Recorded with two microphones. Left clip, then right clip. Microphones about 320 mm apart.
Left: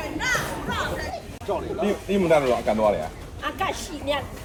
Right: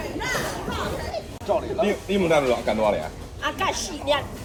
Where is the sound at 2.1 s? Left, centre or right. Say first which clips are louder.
Left 2 dB; centre.